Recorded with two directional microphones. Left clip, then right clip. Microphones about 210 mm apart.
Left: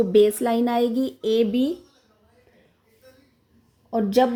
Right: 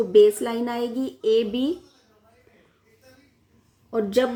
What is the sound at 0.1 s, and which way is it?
Speech, 30° left (ahead or behind).